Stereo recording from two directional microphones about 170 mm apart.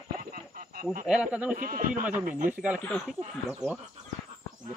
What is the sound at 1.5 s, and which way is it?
Speech, 55° right (ahead or behind).